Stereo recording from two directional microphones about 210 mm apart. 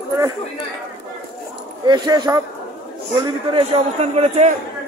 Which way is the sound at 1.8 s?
20° right (ahead or behind).